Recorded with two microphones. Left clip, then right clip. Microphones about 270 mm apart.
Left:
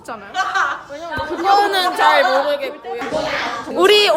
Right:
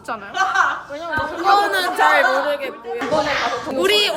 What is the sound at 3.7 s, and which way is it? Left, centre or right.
Speech, left.